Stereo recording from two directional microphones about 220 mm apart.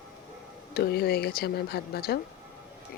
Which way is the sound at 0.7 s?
45° left (ahead or behind).